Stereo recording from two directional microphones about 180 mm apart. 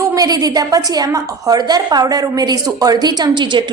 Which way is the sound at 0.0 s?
20° right (ahead or behind).